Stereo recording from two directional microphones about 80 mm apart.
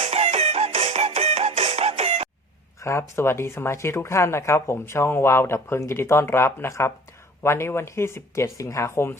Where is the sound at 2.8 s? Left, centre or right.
Left.